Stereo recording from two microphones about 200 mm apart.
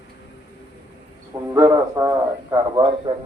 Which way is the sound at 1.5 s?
15° right (ahead or behind).